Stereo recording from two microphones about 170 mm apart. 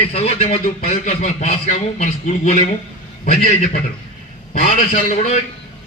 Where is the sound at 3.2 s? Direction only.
55° left (ahead or behind).